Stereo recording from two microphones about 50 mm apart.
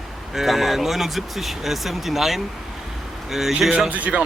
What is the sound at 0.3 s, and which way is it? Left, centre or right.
Speech, centre.